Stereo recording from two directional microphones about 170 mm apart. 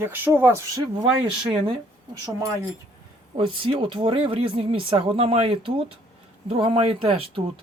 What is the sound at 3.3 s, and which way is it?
Speech, 30° right (ahead or behind).